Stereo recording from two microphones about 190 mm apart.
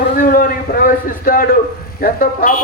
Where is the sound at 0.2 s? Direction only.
45° left (ahead or behind).